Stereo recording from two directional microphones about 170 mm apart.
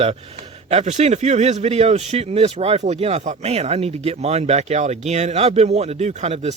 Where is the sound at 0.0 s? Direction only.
40° right (ahead or behind).